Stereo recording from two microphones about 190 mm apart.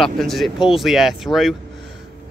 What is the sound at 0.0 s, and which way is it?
Speech, centre (ahead or behind).